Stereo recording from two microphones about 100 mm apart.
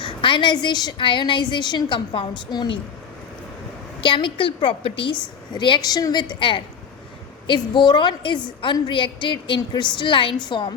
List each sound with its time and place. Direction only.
0.0 s a woman's voice: 55° left (ahead or behind)
4.0 s a woman's voice: 55° left (ahead or behind)
5.5 s a woman's voice: 50° left (ahead or behind)